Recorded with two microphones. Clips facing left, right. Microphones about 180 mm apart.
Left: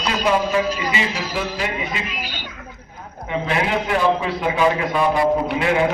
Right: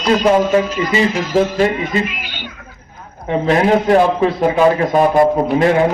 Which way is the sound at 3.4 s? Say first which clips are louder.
Right 9 dB; 40° right (ahead or behind).